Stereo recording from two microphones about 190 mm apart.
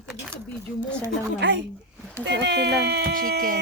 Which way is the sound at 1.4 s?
65° right (ahead or behind).